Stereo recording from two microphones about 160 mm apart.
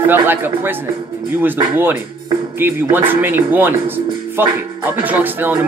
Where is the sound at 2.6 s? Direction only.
15° right (ahead or behind).